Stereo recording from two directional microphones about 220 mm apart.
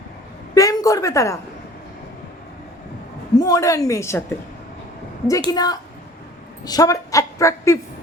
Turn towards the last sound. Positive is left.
turn(degrees=15)  # may be behind; listen again after turning